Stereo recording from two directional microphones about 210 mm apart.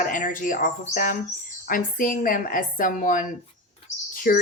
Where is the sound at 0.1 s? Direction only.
40° left (ahead or behind).